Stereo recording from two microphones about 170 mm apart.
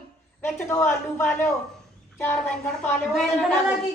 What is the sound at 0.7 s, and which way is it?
Speech, 15° left (ahead or behind).